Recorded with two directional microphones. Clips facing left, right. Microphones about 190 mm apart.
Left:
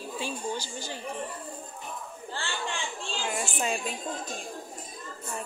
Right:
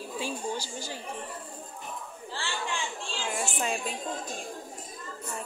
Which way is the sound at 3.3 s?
Centre (ahead or behind).